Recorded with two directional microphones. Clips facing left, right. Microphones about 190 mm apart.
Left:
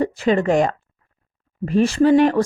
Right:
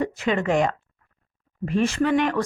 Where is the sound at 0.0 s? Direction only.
35° left (ahead or behind).